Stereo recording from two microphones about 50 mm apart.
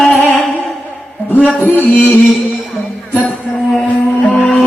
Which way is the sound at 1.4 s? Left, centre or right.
Left.